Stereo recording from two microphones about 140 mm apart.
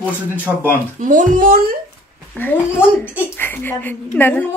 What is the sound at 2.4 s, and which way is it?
A woman's voice, 15° left (ahead or behind).